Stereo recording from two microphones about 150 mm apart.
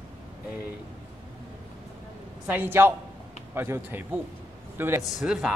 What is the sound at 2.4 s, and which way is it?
A man's voice, 15° right (ahead or behind).